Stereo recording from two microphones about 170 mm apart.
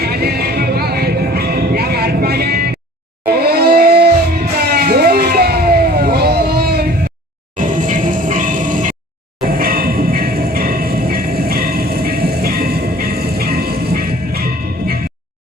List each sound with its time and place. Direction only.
0.0 s music: 70° right (ahead or behind)
3.2 s a sound: 70° right (ahead or behind)
7.5 s music: 50° right (ahead or behind)